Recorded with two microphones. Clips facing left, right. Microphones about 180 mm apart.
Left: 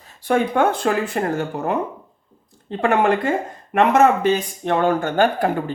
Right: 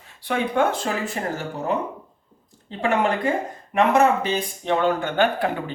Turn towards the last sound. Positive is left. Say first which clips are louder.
# left 3 dB
turn(degrees=45)  # may be behind; listen again after turning